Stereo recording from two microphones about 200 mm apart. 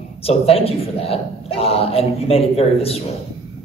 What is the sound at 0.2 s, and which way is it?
A man's voice, 30° left (ahead or behind).